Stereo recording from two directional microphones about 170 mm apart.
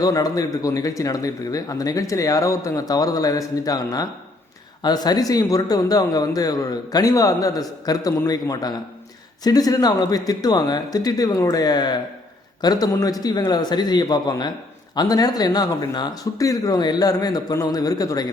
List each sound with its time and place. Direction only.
0.0 s speech: 20° left (ahead or behind)